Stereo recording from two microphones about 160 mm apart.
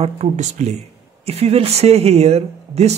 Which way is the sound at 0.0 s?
45° right (ahead or behind).